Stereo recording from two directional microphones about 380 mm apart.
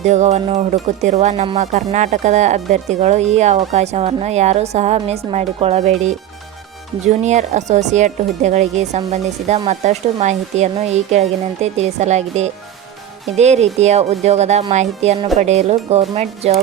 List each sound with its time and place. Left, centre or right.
0.0 s speech: centre